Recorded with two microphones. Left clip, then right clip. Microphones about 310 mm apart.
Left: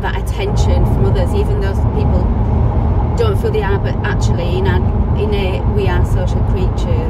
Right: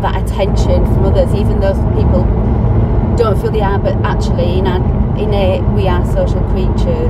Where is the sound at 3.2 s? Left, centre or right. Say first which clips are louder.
Right 3 dB; centre.